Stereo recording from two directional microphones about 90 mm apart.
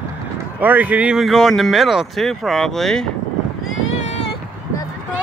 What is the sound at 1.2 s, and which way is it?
Speech, centre (ahead or behind).